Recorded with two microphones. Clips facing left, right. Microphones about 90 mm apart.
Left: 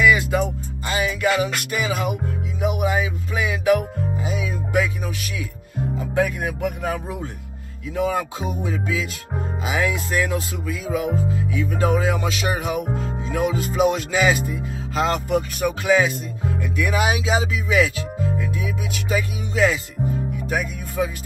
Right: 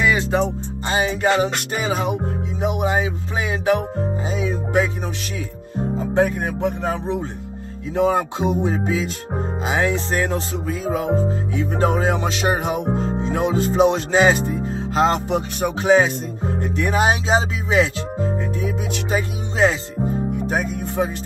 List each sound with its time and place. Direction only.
0.0 s music: 30° right (ahead or behind)
2.6 s speech: 35° right (ahead or behind)